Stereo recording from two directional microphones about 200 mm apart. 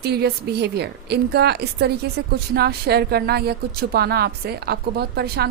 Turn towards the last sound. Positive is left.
turn(degrees=-55)  # may be behind; listen again after turning